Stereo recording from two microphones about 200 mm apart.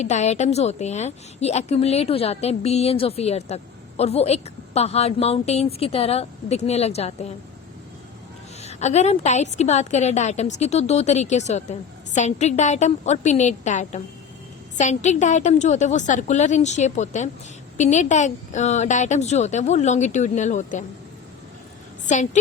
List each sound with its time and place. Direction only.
0.0 s a woman's voice: 35° left (ahead or behind)
8.6 s a woman's voice: 35° left (ahead or behind)
22.0 s a woman's voice: 40° left (ahead or behind)